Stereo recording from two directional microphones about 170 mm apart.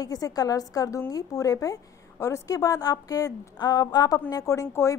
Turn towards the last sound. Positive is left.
turn(degrees=15)  # may be behind; listen again after turning